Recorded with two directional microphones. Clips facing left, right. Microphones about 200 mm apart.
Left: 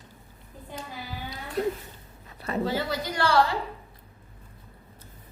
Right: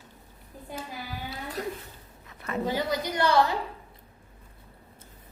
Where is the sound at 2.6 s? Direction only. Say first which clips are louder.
Right 3 dB; 15° right (ahead or behind).